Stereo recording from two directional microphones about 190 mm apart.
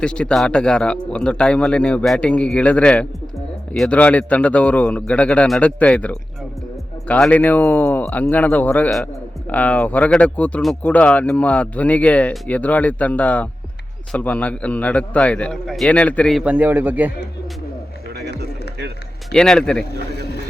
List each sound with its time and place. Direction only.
0.0 s speech: 5° left (ahead or behind)
18.1 s music: 60° right (ahead or behind)
19.3 s speech: 5° left (ahead or behind)
19.8 s speech: 55° left (ahead or behind)